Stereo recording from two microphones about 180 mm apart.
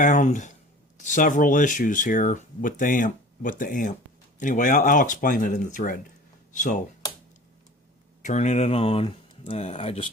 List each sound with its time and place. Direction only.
0.0 s speech: 40° left (ahead or behind)
8.2 s speech: 40° left (ahead or behind)